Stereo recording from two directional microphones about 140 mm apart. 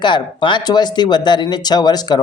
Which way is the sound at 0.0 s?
35° left (ahead or behind).